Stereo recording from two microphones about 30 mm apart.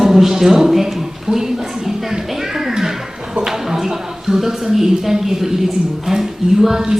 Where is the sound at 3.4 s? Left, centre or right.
Centre.